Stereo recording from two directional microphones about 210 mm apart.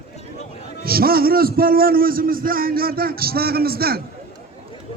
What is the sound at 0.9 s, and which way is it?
A man's voice, 45° right (ahead or behind).